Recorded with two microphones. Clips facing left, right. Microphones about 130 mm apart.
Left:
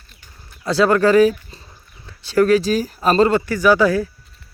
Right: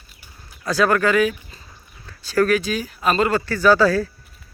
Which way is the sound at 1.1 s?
35° left (ahead or behind).